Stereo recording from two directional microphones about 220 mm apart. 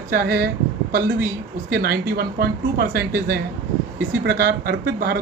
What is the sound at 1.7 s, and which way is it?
Speech, 45° right (ahead or behind).